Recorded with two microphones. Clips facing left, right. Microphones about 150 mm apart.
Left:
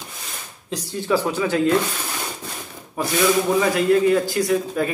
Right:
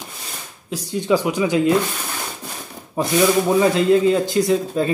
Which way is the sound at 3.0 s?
25° right (ahead or behind).